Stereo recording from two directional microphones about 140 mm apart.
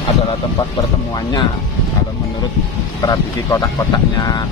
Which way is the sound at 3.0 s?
25° left (ahead or behind).